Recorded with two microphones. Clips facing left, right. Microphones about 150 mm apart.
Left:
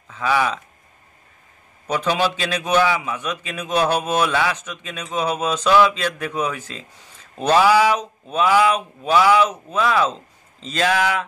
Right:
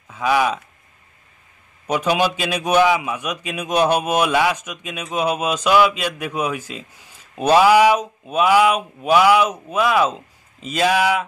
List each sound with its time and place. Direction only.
0.1 s a man's voice: 15° right (ahead or behind)
1.9 s a man's voice: 10° right (ahead or behind)